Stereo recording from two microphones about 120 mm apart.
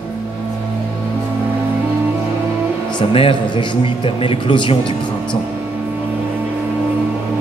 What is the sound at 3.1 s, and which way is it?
A man's voice, 50° left (ahead or behind).